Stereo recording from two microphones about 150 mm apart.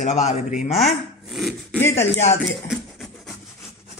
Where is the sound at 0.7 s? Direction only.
Centre (ahead or behind).